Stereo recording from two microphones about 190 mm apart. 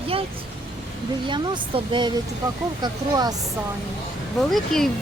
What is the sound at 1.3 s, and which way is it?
Speech, 25° right (ahead or behind).